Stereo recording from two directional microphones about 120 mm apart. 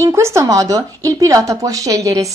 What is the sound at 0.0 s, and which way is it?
Speech, 25° right (ahead or behind).